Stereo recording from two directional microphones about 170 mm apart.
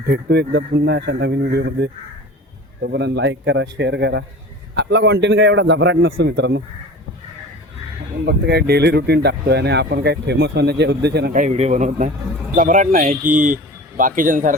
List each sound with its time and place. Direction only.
0.1 s a man's voice: 75° right (ahead or behind)
8.2 s speech: 70° right (ahead or behind)
11.3 s speech: 40° right (ahead or behind)